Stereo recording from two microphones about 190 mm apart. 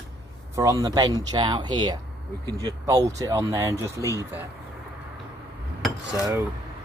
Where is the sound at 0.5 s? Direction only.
15° right (ahead or behind).